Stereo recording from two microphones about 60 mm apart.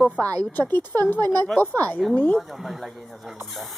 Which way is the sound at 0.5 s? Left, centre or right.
Left.